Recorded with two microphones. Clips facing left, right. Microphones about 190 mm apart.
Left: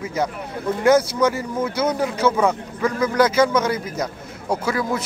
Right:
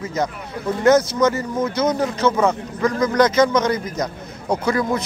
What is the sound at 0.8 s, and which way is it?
Speech, 10° left (ahead or behind).